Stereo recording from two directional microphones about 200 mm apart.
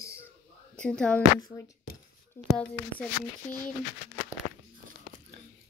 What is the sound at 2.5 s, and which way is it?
Speech, 5° left (ahead or behind).